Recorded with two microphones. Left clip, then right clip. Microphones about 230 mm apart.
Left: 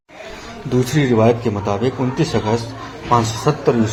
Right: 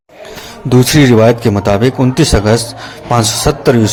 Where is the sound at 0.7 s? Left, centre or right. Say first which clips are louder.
Right 9 dB; right.